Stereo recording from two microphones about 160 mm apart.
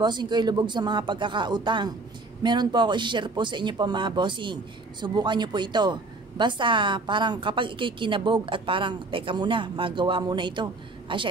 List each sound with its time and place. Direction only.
0.0 s a woman's voice: 25° right (ahead or behind)